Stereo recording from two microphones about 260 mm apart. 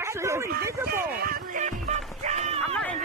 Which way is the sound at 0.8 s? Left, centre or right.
Right.